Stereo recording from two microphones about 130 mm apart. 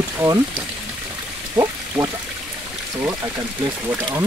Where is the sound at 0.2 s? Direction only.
10° right (ahead or behind).